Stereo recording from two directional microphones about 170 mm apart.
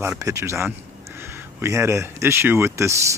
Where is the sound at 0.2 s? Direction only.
20° right (ahead or behind).